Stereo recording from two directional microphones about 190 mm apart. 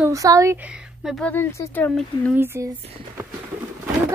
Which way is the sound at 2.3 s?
10° right (ahead or behind).